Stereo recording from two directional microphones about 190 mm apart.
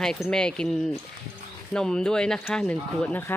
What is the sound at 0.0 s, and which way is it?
Speech, 5° left (ahead or behind).